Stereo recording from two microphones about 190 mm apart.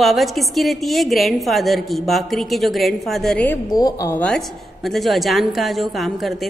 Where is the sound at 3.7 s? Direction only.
20° left (ahead or behind).